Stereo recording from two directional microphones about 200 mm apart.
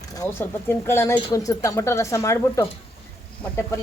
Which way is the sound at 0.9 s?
15° left (ahead or behind).